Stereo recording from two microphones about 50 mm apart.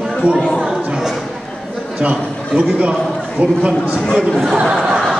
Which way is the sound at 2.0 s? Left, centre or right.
Right.